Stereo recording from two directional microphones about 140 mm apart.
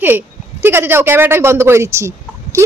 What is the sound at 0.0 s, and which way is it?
A woman's voice, 15° right (ahead or behind).